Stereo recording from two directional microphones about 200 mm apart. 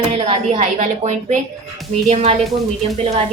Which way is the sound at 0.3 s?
35° right (ahead or behind).